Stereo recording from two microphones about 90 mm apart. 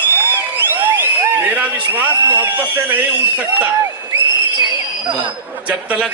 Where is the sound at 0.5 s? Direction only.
20° right (ahead or behind).